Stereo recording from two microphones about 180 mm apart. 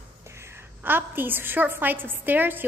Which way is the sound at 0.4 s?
10° right (ahead or behind).